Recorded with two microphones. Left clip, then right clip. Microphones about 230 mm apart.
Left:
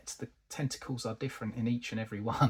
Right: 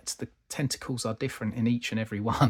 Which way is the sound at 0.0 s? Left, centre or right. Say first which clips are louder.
Right 6 dB; right.